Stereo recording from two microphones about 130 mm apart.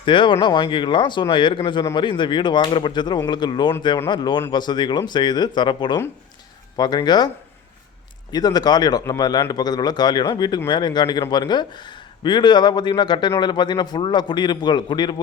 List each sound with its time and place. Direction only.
0.0 s a man's voice: 40° left (ahead or behind)
8.3 s a man's voice: 30° left (ahead or behind)